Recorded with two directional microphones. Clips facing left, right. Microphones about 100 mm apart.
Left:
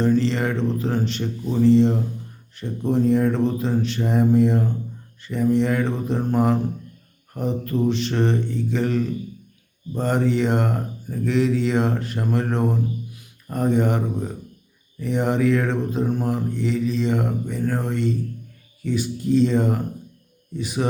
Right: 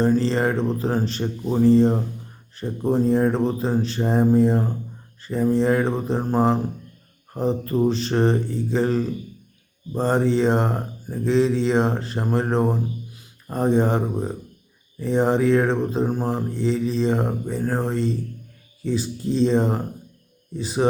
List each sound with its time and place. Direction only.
0.0 s speech: 35° right (ahead or behind)